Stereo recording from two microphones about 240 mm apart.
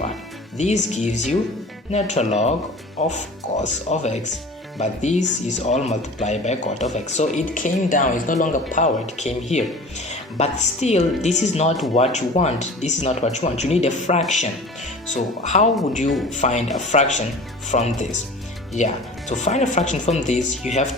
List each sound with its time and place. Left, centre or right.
0.5 s speech: left
19.3 s speech: left